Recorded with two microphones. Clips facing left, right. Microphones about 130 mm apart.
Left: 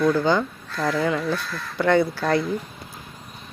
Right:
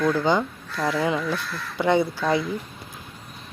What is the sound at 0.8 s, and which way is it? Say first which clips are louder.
Speech: left 1 dB; 10° right (ahead or behind).